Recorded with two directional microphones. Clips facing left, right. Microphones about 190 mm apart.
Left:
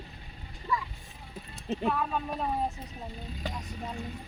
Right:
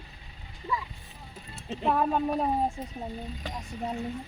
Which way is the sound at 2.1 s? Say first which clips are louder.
Right 6 dB; 30° right (ahead or behind).